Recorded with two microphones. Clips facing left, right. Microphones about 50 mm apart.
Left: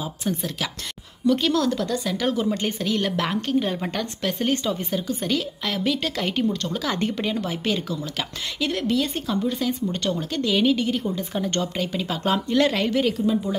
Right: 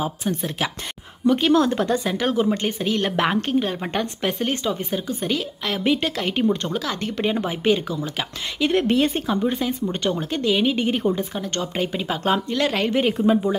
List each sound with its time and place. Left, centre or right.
1.2 s speech: right
2.1 s speech: centre
3.4 s speech: centre
6.4 s speech: right
6.7 s speech: centre
7.2 s speech: right
8.8 s a woman's voice: right
9.9 s speech: centre
10.8 s a woman's voice: right
11.3 s speech: centre
11.7 s speech: centre
12.3 s speech: centre
13.2 s a woman's voice: right